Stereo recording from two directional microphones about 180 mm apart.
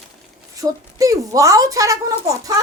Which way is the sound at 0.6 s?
20° right (ahead or behind).